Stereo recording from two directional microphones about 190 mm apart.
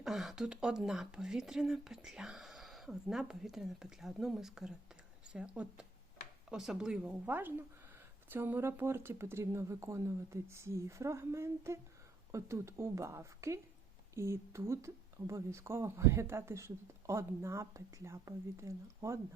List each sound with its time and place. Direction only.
0.0 s speech: centre (ahead or behind)